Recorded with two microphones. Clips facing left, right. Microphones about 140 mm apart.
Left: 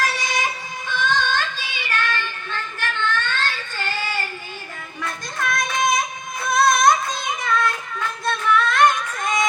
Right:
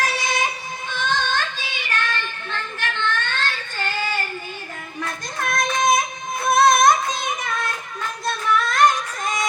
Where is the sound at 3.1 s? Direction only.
50° right (ahead or behind).